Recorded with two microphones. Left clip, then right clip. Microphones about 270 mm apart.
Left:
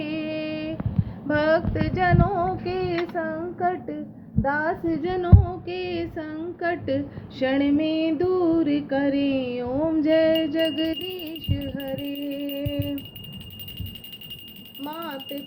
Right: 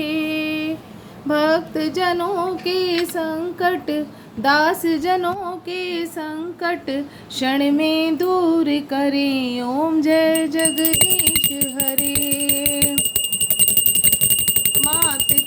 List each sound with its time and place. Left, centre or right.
0.0 s female singing: right
4.4 s speech: right
14.8 s a sound: right